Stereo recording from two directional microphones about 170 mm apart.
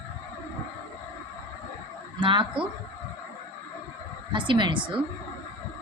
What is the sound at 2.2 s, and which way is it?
Speech, 30° right (ahead or behind).